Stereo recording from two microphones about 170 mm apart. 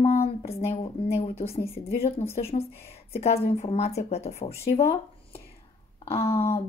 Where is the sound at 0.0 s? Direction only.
40° left (ahead or behind).